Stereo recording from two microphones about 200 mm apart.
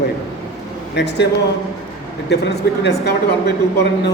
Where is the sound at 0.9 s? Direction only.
60° left (ahead or behind).